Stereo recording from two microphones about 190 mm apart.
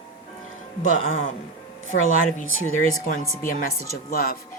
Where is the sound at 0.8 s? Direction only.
40° left (ahead or behind).